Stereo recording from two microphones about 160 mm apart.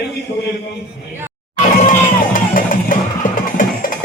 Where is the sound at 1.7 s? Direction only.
55° left (ahead or behind).